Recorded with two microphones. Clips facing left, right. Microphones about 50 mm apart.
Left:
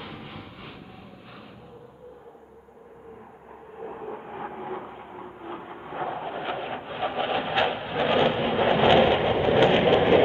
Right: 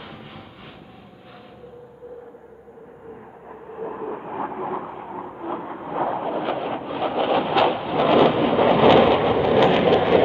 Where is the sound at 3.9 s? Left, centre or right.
Right.